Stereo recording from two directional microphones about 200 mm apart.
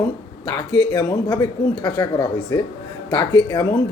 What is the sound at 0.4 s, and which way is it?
Speech, 20° left (ahead or behind).